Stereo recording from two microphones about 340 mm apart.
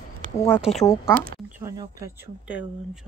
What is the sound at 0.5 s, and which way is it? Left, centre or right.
Speech, centre.